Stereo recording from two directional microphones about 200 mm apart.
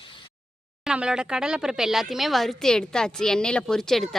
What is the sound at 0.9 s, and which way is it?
Speech, 5° right (ahead or behind).